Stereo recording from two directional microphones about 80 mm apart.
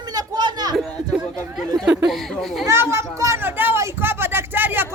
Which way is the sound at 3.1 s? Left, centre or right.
Right.